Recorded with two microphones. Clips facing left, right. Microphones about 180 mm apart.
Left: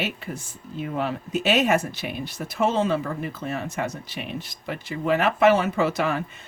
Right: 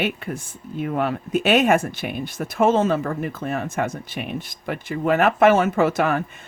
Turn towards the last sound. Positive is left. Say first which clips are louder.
# right 4 dB
turn(degrees=-50)  # may be behind; listen again after turning